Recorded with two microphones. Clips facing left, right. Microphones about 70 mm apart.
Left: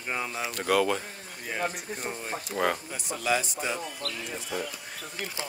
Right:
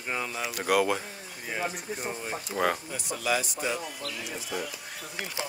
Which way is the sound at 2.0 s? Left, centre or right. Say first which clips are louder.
Left 1 dB; centre.